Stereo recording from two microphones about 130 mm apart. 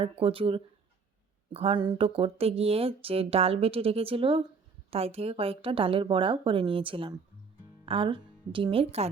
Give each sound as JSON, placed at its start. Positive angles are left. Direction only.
{"t": 0.0, "sound": "speech", "side_deg": -45}